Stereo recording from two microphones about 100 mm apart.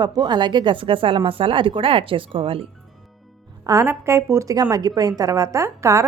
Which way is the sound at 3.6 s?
35° right (ahead or behind).